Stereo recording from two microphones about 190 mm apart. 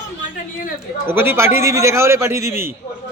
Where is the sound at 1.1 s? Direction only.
10° right (ahead or behind).